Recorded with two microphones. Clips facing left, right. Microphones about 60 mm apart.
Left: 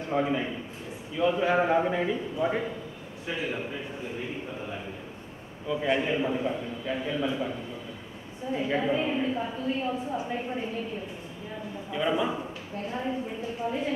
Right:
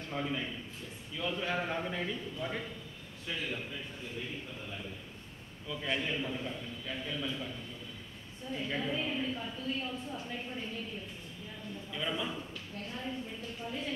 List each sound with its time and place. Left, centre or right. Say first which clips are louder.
0.1 s a man's voice: left 9 dB; left
5.7 s a man's voice: left 9 dB; left
11.9 s a man's voice: left 10 dB; centre